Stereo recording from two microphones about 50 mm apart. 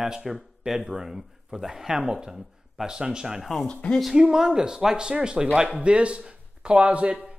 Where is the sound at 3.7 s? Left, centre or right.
Left.